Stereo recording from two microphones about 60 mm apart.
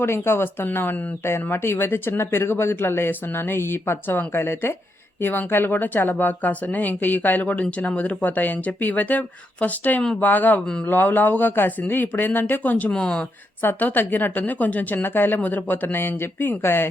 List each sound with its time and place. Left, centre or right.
0.0 s a woman's voice: left
12.9 s speech: centre
13.6 s speech: left